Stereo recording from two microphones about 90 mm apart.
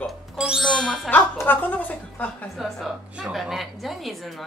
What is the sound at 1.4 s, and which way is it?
Speech, 20° left (ahead or behind).